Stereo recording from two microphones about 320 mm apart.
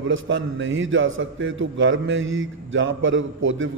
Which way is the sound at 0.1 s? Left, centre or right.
Right.